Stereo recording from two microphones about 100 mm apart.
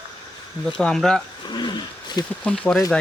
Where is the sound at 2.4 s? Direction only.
10° left (ahead or behind).